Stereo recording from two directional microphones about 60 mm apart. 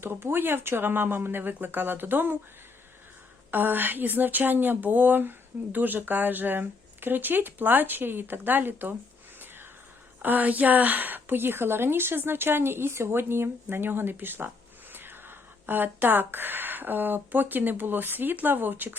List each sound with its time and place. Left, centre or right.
0.0 s a woman's voice: right
3.5 s a woman's voice: right
10.2 s a woman's voice: right